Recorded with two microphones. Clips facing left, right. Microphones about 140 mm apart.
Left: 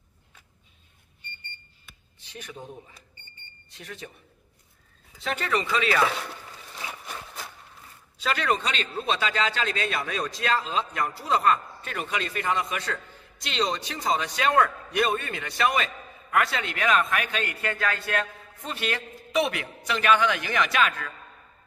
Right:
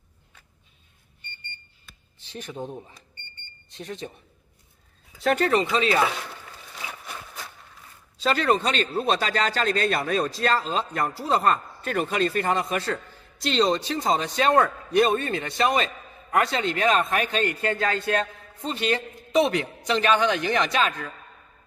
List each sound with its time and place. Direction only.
2.3 s speech: 30° right (ahead or behind)
5.2 s speech: 45° right (ahead or behind)
5.6 s speech: 30° right (ahead or behind)
8.2 s a man's voice: 35° right (ahead or behind)